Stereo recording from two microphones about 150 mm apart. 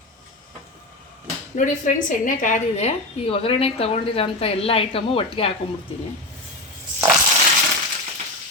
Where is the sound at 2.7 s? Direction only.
40° left (ahead or behind).